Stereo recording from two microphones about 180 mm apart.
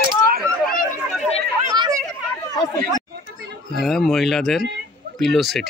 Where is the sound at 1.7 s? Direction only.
20° right (ahead or behind).